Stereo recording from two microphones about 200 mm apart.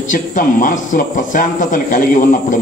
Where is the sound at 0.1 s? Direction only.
40° left (ahead or behind).